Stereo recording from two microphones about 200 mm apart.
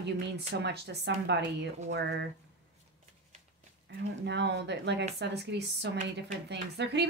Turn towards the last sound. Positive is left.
turn(degrees=-60)  # may be behind; listen again after turning